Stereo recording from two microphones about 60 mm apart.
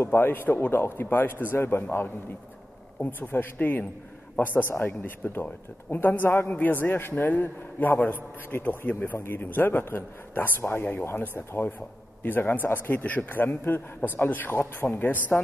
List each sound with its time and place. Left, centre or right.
0.0 s a man's voice: left